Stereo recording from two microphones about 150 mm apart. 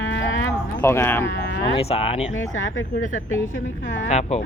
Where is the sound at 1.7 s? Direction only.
40° left (ahead or behind).